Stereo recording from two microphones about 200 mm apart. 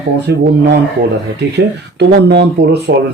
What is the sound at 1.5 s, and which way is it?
Speech, 55° right (ahead or behind).